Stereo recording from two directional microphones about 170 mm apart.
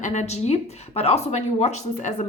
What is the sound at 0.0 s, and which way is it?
Speech, 45° left (ahead or behind).